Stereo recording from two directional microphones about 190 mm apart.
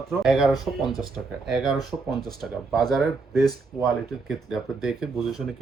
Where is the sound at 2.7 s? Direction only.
Centre (ahead or behind).